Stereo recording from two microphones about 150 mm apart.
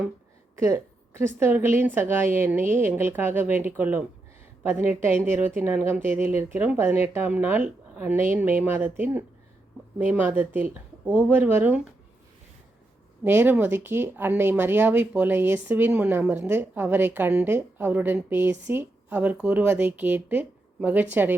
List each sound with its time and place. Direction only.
0.5 s speech: 20° right (ahead or behind)
13.2 s speech: 15° right (ahead or behind)